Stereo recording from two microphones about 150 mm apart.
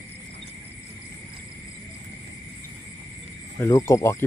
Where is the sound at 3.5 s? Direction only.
20° left (ahead or behind).